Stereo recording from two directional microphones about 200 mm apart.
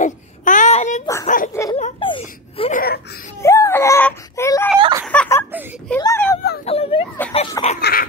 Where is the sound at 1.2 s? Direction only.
45° left (ahead or behind).